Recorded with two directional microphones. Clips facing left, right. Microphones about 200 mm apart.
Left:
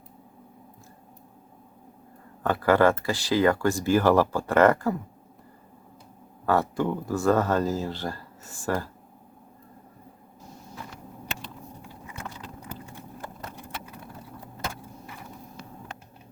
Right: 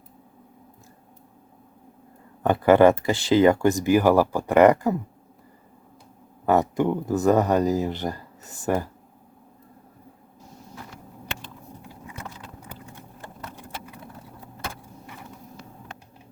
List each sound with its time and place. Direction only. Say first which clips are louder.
2.4 s speech: right 5 dB; 20° right (ahead or behind)
6.4 s speech: right 4 dB; 20° right (ahead or behind)